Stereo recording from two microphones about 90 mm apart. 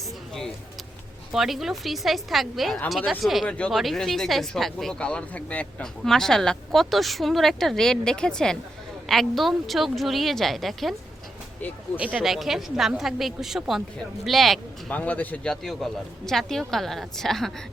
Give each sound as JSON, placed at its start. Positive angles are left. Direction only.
{"t": 1.3, "sound": "speech", "side_deg": 0}
{"t": 6.1, "sound": "speech", "side_deg": 5}
{"t": 11.9, "sound": "speech", "side_deg": -10}
{"t": 14.8, "sound": "a man's voice", "side_deg": 20}
{"t": 15.6, "sound": "speech", "side_deg": 5}